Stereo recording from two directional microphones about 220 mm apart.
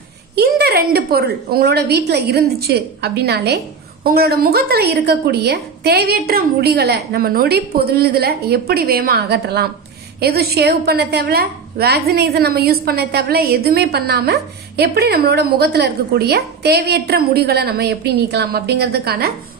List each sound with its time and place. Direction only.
0.4 s a woman's voice: 45° right (ahead or behind)